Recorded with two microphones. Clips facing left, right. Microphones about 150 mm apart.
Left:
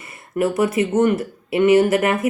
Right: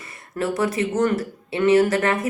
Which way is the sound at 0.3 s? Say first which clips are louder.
Left 4 dB; 25° left (ahead or behind).